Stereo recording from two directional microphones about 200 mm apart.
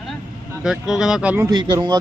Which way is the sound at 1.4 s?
20° right (ahead or behind).